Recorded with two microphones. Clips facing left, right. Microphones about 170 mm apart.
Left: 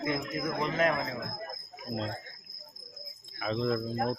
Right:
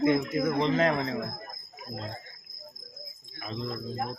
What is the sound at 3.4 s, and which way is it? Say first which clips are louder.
Speech: left 6 dB; 80° left.